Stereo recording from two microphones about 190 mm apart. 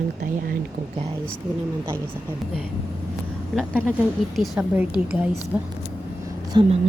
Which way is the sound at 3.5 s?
5° right (ahead or behind).